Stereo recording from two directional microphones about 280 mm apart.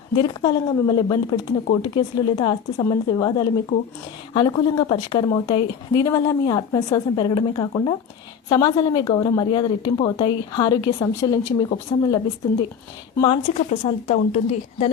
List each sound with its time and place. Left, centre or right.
0.2 s speech: centre
13.1 s speech: centre